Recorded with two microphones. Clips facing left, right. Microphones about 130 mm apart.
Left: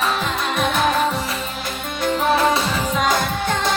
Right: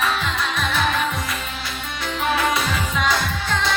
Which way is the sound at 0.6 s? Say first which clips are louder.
Left 5 dB; 50° left (ahead or behind).